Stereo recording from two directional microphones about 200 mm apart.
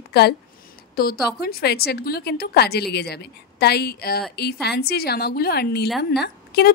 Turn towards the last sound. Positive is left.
turn(degrees=55)  # may be behind; listen again after turning